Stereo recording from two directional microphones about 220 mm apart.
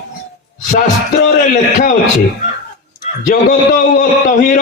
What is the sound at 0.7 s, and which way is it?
Speech, 35° left (ahead or behind).